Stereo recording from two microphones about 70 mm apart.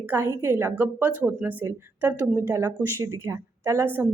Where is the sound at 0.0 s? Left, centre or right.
Right.